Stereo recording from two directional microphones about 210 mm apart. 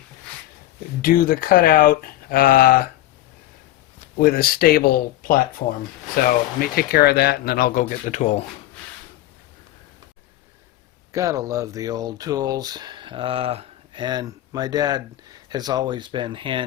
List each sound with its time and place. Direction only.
1.0 s speech: 45° left (ahead or behind)
4.2 s speech: 45° left (ahead or behind)
11.1 s speech: 15° right (ahead or behind)